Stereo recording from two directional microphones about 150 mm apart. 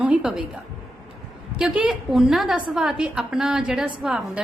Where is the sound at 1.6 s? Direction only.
5° right (ahead or behind).